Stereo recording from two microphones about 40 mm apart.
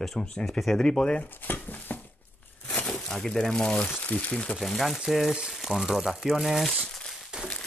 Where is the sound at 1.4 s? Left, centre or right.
Left.